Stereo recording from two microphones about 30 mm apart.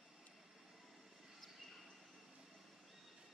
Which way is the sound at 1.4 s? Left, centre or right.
Centre.